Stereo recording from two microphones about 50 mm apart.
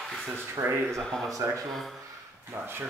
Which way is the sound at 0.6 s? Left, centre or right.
Right.